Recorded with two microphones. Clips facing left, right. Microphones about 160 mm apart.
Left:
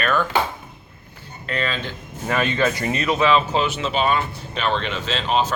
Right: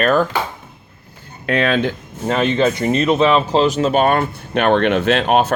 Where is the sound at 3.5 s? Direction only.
35° right (ahead or behind); by 5.5 s 60° right (ahead or behind).